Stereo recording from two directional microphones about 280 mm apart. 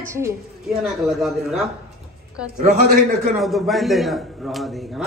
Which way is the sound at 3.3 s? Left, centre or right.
Centre.